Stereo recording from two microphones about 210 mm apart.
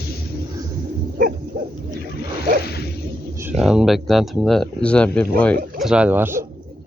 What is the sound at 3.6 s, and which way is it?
Speech, centre (ahead or behind).